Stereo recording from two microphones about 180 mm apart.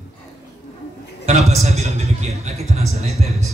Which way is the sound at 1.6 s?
35° right (ahead or behind).